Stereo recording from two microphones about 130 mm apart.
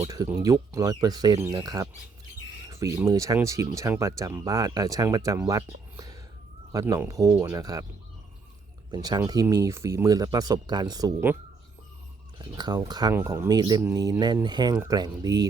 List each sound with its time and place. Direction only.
0.0 s speech: 30° right (ahead or behind)
8.9 s speech: 30° right (ahead or behind)
12.4 s speech: 35° right (ahead or behind)
13.1 s speech: 15° right (ahead or behind)
13.5 s speech: 30° right (ahead or behind)